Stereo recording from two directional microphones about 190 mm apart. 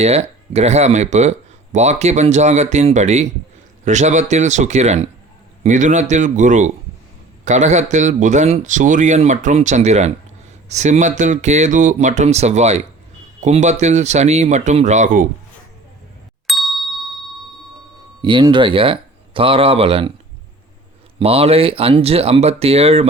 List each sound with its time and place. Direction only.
0.0 s speech: 35° right (ahead or behind)
16.5 s ding: centre (ahead or behind)
18.2 s speech: 25° right (ahead or behind)
21.2 s speech: 30° right (ahead or behind)